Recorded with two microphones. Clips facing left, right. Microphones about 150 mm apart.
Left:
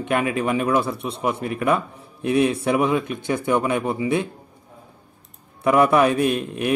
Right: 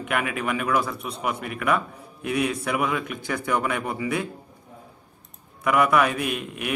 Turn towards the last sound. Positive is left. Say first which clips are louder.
# left 7 dB
turn(degrees=30)  # may be behind; listen again after turning